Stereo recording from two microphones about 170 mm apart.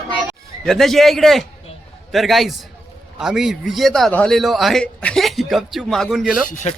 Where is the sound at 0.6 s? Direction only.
Centre (ahead or behind).